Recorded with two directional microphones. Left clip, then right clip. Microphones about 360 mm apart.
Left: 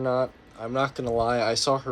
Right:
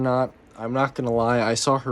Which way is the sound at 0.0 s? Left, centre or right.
Right.